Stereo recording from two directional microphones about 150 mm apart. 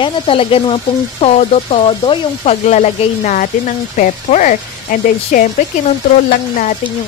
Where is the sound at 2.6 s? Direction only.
50° left (ahead or behind).